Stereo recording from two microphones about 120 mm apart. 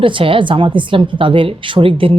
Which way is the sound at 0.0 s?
45° right (ahead or behind).